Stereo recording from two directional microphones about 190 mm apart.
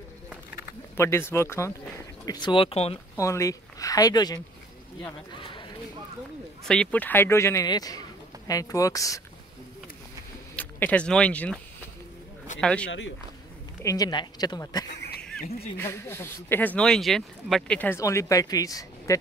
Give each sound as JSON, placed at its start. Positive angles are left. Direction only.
{"t": 0.9, "sound": "speech", "side_deg": 15}
{"t": 3.2, "sound": "speech", "side_deg": 15}
{"t": 5.4, "sound": "a sound", "side_deg": 25}
{"t": 6.6, "sound": "speech", "side_deg": 5}
{"t": 10.5, "sound": "speech", "side_deg": 10}
{"t": 12.8, "sound": "speech", "side_deg": 75}
{"t": 13.8, "sound": "speech", "side_deg": 20}